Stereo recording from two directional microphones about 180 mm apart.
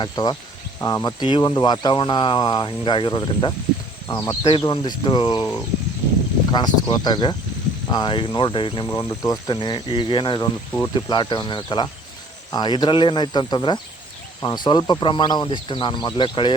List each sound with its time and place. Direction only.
0.0 s speech: 25° left (ahead or behind)
6.5 s speech: 25° left (ahead or behind)
8.9 s speech: 15° left (ahead or behind)